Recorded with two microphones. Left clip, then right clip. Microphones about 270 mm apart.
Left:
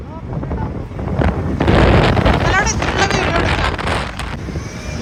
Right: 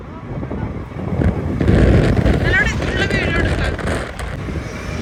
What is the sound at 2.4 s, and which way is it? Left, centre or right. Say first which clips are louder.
Vehicle: left 1 dB; left.